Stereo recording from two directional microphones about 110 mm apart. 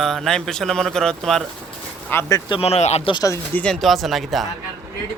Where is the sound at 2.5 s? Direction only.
65° left (ahead or behind).